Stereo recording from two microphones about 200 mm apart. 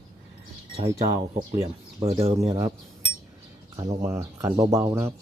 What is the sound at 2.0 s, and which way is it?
Speech, 30° right (ahead or behind).